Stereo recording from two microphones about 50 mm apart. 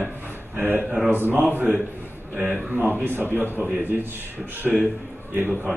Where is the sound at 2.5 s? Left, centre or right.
Right.